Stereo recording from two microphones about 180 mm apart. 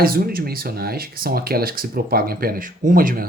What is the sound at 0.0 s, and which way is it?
Speech, 55° right (ahead or behind).